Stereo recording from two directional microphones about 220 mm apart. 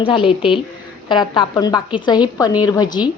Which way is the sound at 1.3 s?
20° left (ahead or behind).